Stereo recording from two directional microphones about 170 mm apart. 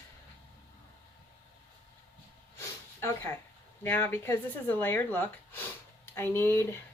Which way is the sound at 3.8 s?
10° left (ahead or behind).